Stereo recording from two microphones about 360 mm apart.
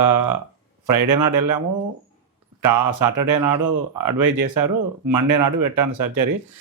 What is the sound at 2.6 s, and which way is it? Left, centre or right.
Speech, right.